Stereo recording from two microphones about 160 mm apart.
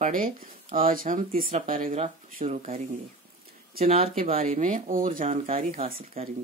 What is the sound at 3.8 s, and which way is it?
Speech, 40° right (ahead or behind).